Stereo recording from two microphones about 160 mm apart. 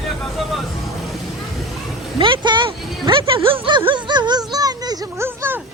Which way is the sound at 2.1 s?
30° right (ahead or behind).